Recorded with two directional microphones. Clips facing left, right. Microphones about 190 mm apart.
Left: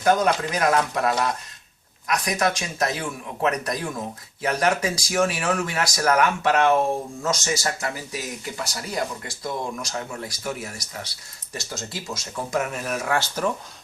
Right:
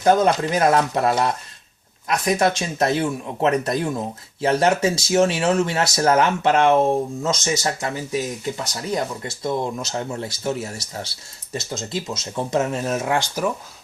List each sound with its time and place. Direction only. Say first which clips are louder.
0.0 s speech: right 3 dB; 25° right (ahead or behind)